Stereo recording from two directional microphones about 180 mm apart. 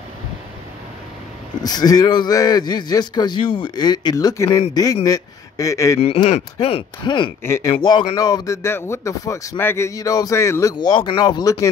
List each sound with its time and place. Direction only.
1.6 s speech: 20° left (ahead or behind)
5.9 s speech: 35° left (ahead or behind)
7.4 s speech: 15° left (ahead or behind)
7.7 s speech: 25° left (ahead or behind)